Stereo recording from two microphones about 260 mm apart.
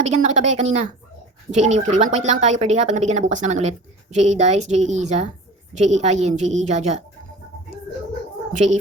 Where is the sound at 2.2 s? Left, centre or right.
Right.